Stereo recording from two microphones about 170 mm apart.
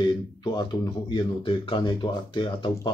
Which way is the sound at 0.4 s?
25° left (ahead or behind).